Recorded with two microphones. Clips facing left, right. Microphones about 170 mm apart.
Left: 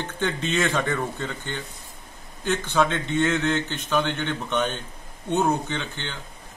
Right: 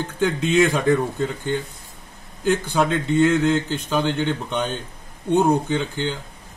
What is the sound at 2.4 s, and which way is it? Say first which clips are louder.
Speech: right 3 dB; 10° right (ahead or behind).